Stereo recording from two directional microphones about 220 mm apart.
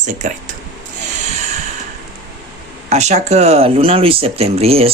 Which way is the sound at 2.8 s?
30° right (ahead or behind).